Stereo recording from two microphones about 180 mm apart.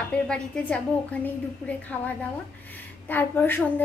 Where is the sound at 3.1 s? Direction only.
10° left (ahead or behind).